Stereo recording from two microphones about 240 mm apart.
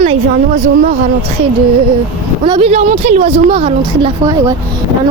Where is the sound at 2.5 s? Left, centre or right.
Right.